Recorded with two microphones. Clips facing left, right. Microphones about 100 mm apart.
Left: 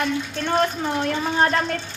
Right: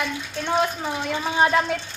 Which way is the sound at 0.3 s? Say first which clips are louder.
Even; 10° right (ahead or behind).